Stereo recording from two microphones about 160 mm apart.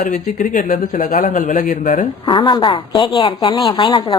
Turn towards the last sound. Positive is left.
turn(degrees=30)  # may be behind; listen again after turning